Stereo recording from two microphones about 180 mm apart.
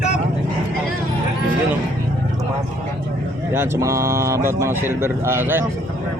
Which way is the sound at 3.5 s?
15° right (ahead or behind).